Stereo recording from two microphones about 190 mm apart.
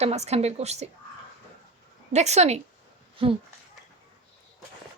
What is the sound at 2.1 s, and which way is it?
A woman's voice, 35° right (ahead or behind).